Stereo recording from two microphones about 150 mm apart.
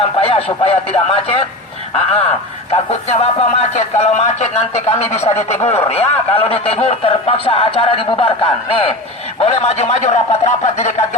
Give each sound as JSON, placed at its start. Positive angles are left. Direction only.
{"t": 0.2, "sound": "speech", "side_deg": 40}